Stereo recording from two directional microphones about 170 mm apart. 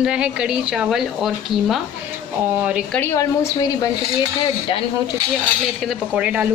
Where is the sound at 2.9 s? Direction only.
15° left (ahead or behind).